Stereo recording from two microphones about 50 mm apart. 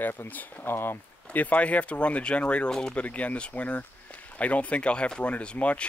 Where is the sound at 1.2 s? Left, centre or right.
Left.